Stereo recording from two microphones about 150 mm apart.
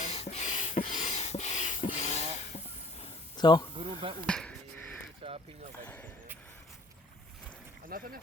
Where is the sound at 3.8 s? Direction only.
40° right (ahead or behind).